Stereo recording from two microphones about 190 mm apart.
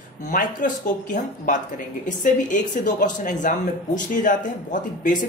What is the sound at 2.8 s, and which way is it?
A man's voice, 40° left (ahead or behind).